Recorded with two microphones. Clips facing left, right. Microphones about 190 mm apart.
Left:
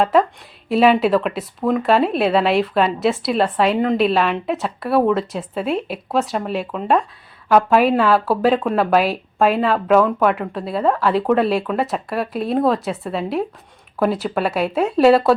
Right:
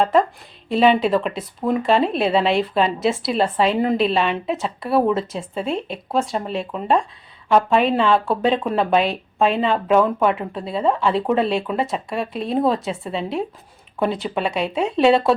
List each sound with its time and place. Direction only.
0.0 s speech: centre (ahead or behind)